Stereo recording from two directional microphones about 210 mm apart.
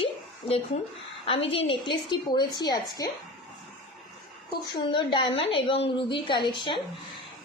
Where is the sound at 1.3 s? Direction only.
25° left (ahead or behind).